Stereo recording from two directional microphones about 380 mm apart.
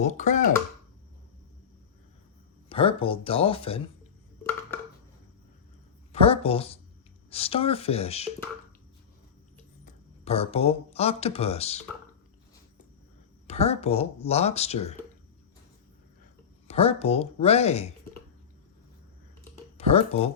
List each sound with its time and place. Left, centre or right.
0.0 s speech: centre
2.6 s speech: centre
6.1 s speech: centre
9.8 s speech: centre
13.5 s speech: centre
16.6 s speech: centre
19.7 s speech: centre